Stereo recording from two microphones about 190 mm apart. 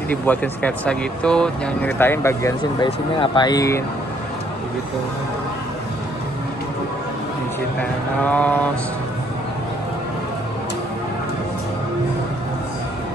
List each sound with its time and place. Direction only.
0.1 s speech: 10° left (ahead or behind)
8.2 s speech: 10° left (ahead or behind)